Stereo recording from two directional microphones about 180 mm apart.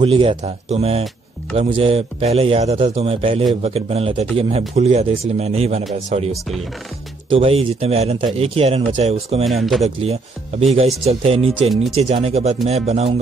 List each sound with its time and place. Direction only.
0.0 s a man's voice: 30° right (ahead or behind)
9.4 s speech: centre (ahead or behind)
10.7 s a man's voice: 35° right (ahead or behind)